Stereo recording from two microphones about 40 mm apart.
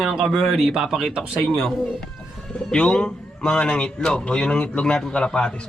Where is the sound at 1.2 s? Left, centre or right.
Centre.